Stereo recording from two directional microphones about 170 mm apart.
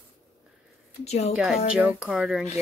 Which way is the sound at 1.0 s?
40° left (ahead or behind).